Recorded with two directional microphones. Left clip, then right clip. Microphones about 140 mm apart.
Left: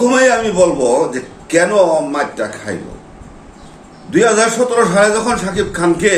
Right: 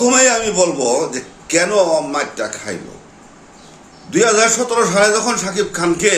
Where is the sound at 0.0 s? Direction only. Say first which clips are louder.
Left 2 dB; 20° right (ahead or behind).